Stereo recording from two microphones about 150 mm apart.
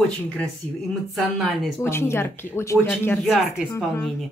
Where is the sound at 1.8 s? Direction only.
15° left (ahead or behind).